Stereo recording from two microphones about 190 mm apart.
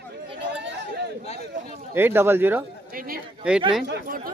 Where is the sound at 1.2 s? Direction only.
35° left (ahead or behind).